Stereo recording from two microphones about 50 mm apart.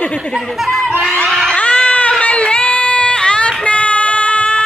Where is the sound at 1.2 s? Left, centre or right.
Centre.